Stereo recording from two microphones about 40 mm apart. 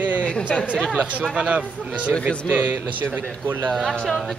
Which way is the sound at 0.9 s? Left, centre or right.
Right.